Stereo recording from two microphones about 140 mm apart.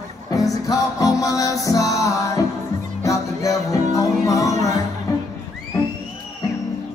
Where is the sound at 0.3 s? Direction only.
25° left (ahead or behind).